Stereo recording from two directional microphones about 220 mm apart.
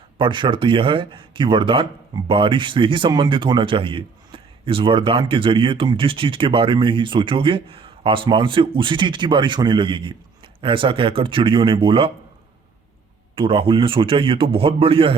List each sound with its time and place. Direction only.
0.2 s speech: 20° right (ahead or behind)
13.3 s speech: 25° right (ahead or behind)